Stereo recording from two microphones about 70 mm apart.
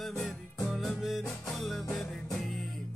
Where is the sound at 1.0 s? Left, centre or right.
Centre.